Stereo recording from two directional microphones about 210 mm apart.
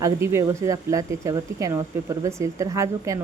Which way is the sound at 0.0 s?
15° right (ahead or behind).